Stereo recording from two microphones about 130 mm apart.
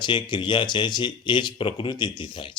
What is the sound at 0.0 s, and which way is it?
Speech, 40° left (ahead or behind).